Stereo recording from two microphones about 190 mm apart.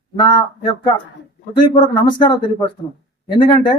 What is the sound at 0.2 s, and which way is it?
Speech, 25° left (ahead or behind).